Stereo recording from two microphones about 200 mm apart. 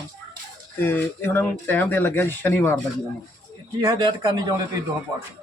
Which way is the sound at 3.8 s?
20° right (ahead or behind).